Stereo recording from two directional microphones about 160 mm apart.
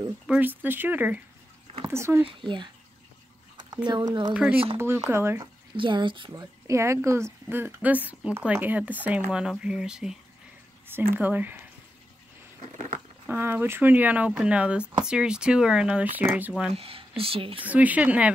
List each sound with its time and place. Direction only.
0.3 s a woman's voice: 10° right (ahead or behind)
2.4 s speech: 30° right (ahead or behind)
3.7 s speech: 25° right (ahead or behind)
4.3 s a woman's voice: 5° right (ahead or behind)
5.4 s speech: 30° right (ahead or behind)
6.4 s a woman's voice: 15° right (ahead or behind)
11.1 s a woman's voice: 10° right (ahead or behind)
13.3 s a woman's voice: 15° right (ahead or behind)
16.7 s speech: 35° right (ahead or behind)
17.6 s a woman's voice: 10° right (ahead or behind)